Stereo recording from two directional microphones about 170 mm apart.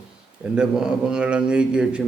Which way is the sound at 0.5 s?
5° right (ahead or behind).